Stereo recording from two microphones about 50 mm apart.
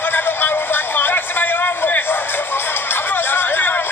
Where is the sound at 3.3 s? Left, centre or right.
Left.